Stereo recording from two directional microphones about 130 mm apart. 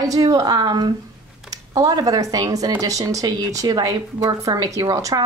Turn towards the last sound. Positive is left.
turn(degrees=-25)  # may be behind; listen again after turning